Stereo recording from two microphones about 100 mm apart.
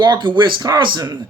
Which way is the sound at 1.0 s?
40° right (ahead or behind).